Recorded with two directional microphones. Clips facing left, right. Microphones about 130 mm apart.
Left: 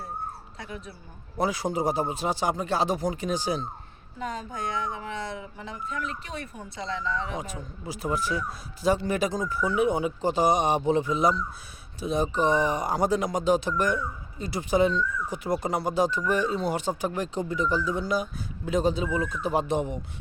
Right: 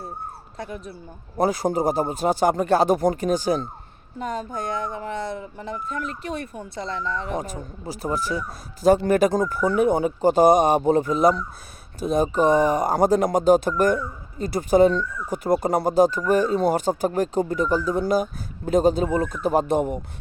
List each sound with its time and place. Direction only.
0.5 s speech: 45° right (ahead or behind)